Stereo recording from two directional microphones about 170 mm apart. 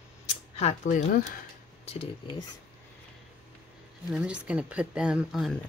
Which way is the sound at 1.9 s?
30° left (ahead or behind).